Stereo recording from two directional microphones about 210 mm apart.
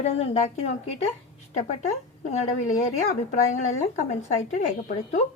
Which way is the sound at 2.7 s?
35° left (ahead or behind).